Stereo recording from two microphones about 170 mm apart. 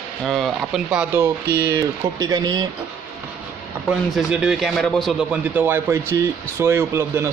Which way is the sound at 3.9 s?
5° right (ahead or behind).